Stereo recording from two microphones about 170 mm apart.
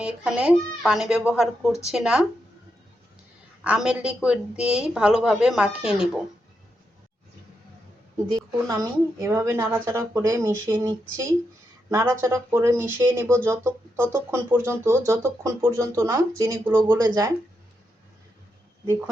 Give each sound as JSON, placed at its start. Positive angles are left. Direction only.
{"t": 0.0, "sound": "a woman's voice", "side_deg": -5}
{"t": 3.6, "sound": "a woman's voice", "side_deg": -5}
{"t": 8.3, "sound": "speech", "side_deg": -20}